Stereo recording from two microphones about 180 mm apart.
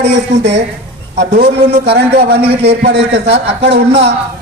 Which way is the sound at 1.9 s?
65° right (ahead or behind).